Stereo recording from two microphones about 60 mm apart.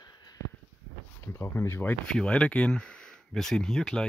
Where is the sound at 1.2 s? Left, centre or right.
Left.